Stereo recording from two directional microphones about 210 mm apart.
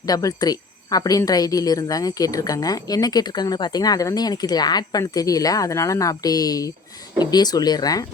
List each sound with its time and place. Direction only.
0.1 s a woman's voice: 20° left (ahead or behind)